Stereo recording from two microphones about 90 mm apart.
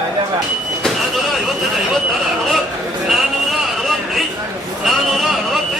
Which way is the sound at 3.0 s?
Centre (ahead or behind).